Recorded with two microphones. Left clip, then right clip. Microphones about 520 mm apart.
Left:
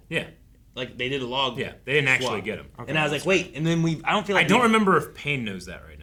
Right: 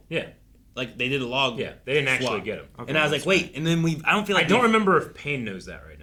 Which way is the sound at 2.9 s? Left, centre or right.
Left.